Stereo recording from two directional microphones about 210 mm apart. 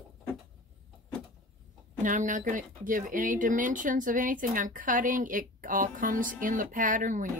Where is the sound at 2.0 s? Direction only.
40° right (ahead or behind).